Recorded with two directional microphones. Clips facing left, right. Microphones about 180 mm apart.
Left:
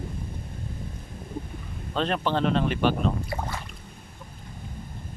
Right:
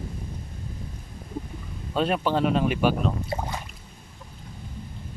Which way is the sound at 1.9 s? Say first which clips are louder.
Right 2 dB; 10° right (ahead or behind).